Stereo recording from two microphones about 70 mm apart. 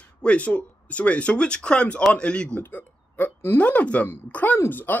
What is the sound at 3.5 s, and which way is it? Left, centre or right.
Speech, centre.